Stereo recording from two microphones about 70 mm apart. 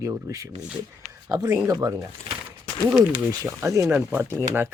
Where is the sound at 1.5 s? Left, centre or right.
Right.